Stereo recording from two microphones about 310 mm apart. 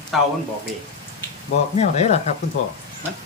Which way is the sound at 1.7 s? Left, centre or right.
Left.